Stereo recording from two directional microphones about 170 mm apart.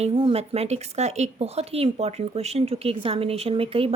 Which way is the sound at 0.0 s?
35° right (ahead or behind).